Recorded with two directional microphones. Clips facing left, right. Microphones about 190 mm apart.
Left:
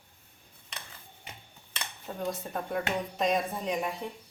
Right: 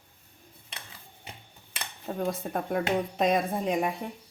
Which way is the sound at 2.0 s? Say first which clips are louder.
Right 4 dB; 50° right (ahead or behind).